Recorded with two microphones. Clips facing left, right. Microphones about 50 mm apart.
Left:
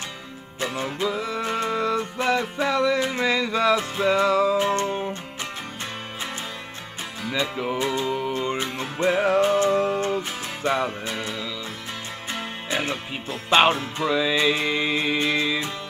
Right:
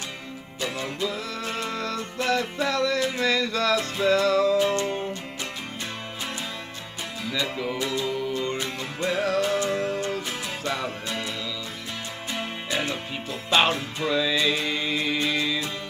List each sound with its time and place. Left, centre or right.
0.9 s music: centre
4.6 s music: left
7.4 s music: left
12.6 s music: left